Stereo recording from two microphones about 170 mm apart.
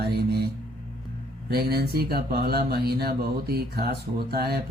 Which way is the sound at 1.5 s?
70° right (ahead or behind).